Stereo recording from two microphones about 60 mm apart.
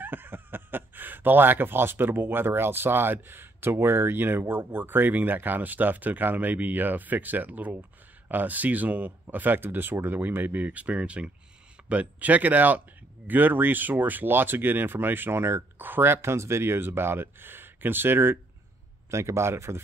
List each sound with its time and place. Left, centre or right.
0.0 s speech: right
19.0 s a man's voice: right